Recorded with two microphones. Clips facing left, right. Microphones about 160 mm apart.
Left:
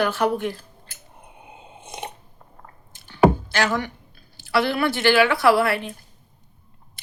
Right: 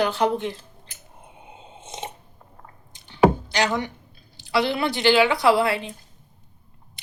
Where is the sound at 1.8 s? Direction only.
25° right (ahead or behind).